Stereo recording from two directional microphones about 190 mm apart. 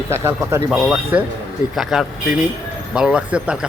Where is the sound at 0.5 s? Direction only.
5° right (ahead or behind).